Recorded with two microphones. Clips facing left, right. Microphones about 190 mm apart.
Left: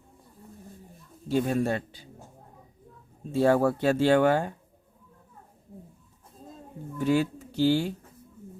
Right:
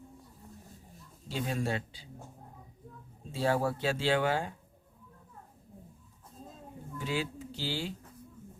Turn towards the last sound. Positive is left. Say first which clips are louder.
# left 13 dB
turn(degrees=50)  # may be behind; listen again after turning